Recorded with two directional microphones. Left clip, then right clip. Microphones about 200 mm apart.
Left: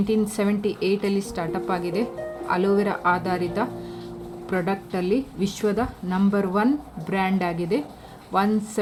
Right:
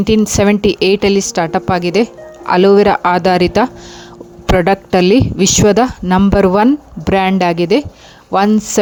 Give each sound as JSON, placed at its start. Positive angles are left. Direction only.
{"t": 0.0, "sound": "a woman's voice", "side_deg": -45}